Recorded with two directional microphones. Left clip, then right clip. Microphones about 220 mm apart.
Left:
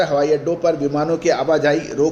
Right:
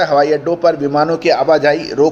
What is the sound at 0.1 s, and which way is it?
Speech, 25° right (ahead or behind).